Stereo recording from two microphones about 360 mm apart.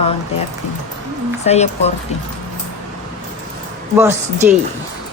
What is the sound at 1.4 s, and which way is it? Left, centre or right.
Speech, centre.